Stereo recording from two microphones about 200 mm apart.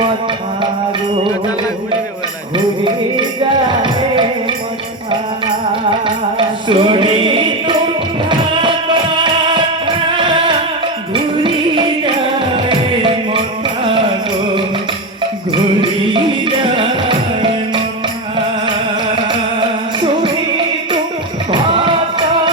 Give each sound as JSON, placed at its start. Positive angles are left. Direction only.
{"t": 3.7, "sound": "music", "side_deg": -25}
{"t": 6.7, "sound": "music", "side_deg": -25}
{"t": 15.5, "sound": "music", "side_deg": -25}
{"t": 16.7, "sound": "tabla", "side_deg": -25}
{"t": 19.1, "sound": "music", "side_deg": -25}
{"t": 21.5, "sound": "music", "side_deg": -25}